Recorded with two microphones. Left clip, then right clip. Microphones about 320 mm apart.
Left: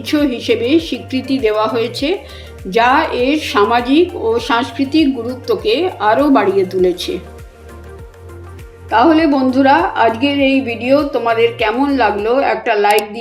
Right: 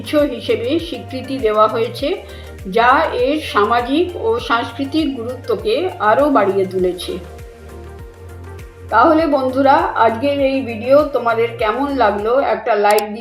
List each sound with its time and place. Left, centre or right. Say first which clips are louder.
0.0 s a woman's voice: even; left
8.9 s a woman's voice: left 1 dB; left